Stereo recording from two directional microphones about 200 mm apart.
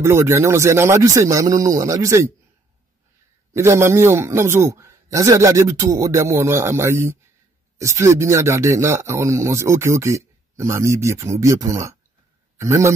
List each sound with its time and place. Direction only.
0.0 s speech: 15° right (ahead or behind)
3.5 s a man's voice: 15° right (ahead or behind)